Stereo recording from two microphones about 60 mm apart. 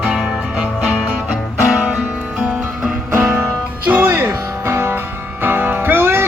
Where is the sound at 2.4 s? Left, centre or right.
Centre.